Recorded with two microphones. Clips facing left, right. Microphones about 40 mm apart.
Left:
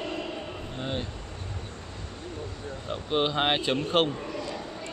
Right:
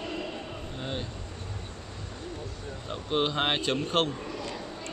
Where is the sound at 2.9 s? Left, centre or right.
Centre.